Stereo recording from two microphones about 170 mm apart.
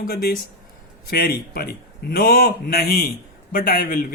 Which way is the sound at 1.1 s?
60° left (ahead or behind).